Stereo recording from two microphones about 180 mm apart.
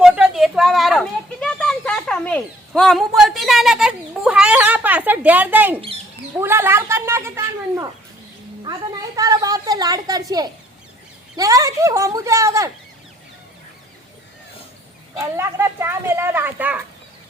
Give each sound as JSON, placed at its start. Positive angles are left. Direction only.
{"t": 0.0, "sound": "a sound", "side_deg": -5}
{"t": 6.3, "sound": "a woman's voice", "side_deg": -15}
{"t": 15.1, "sound": "speech", "side_deg": -15}